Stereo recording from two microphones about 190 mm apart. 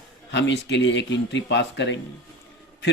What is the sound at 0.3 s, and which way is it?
Speech, 70° left (ahead or behind).